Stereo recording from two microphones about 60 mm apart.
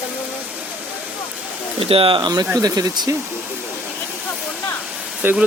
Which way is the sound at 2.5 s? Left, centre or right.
Right.